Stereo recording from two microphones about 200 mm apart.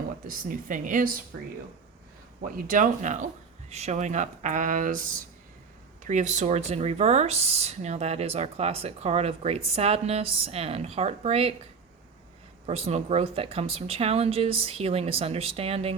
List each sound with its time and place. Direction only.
0.3 s a woman's voice: 40° right (ahead or behind)
2.6 s speech: 40° right (ahead or behind)
6.1 s speech: 35° right (ahead or behind)
12.6 s speech: 30° right (ahead or behind)